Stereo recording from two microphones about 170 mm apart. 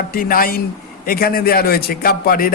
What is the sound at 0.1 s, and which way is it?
Speech, 60° left (ahead or behind).